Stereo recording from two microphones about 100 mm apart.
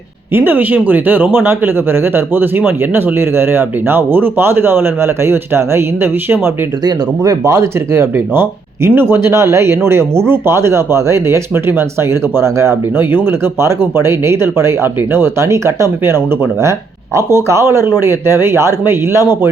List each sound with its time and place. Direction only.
0.3 s speech: 20° right (ahead or behind)
6.8 s speech: 35° right (ahead or behind)